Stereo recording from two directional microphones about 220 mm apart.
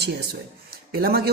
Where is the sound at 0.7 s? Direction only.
45° right (ahead or behind).